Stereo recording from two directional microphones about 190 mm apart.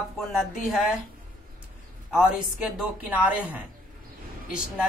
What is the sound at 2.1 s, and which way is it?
A woman's voice, 5° right (ahead or behind).